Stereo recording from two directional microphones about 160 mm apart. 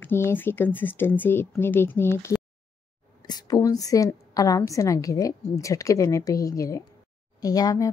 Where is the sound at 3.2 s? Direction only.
25° left (ahead or behind).